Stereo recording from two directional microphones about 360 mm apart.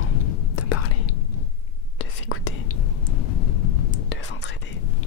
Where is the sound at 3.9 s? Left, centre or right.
Left.